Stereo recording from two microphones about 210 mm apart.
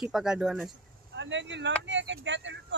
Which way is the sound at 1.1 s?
60° right (ahead or behind).